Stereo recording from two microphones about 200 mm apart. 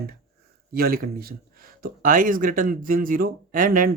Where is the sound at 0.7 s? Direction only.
45° right (ahead or behind).